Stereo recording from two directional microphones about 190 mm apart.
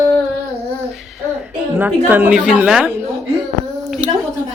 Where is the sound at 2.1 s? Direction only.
5° right (ahead or behind).